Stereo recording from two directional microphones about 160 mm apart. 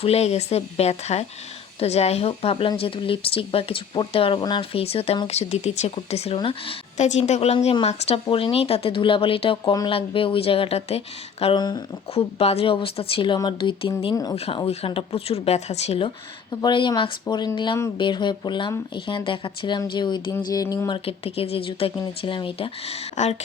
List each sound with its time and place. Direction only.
0.0 s a woman's voice: 40° left (ahead or behind); by 14.3 s 25° left (ahead or behind)
14.3 s a woman's voice: 35° left (ahead or behind)